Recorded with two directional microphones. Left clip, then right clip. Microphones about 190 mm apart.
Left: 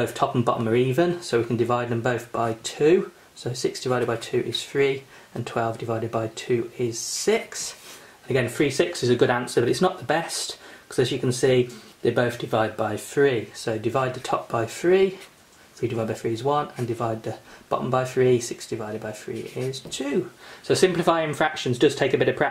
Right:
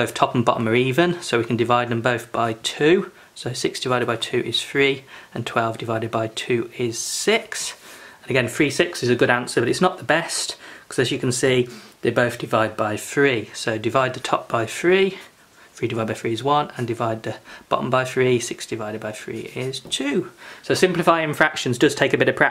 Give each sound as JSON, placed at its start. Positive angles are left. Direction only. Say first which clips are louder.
{"t": 0.0, "sound": "speech", "louder": "right 4 dB", "side_deg": -20}